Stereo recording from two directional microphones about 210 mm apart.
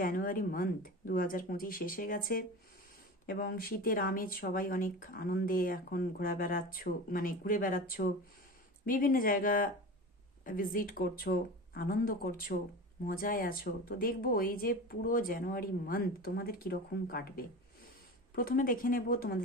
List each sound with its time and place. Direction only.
0.0 s speech: 40° left (ahead or behind)